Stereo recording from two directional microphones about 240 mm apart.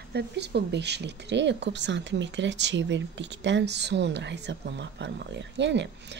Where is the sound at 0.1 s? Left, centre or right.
Right.